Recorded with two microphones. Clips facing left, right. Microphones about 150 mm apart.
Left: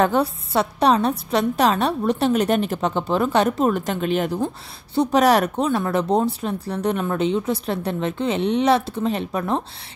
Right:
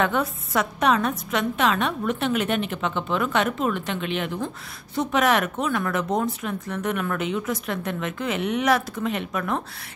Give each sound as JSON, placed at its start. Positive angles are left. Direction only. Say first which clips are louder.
{"t": 0.0, "sound": "a woman's voice", "louder": "left 5 dB", "side_deg": 35}